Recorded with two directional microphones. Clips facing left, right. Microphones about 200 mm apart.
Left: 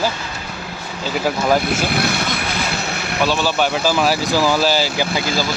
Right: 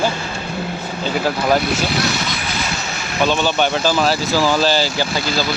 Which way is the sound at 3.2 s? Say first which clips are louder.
Right 1 dB; 5° left (ahead or behind).